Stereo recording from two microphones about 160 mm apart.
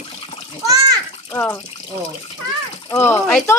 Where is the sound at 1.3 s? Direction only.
15° left (ahead or behind).